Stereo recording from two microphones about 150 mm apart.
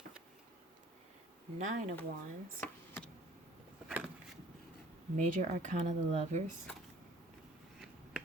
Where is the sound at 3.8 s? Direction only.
5° right (ahead or behind).